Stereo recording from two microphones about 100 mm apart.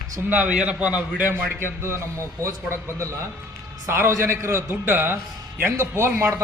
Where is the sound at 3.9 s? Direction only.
25° right (ahead or behind).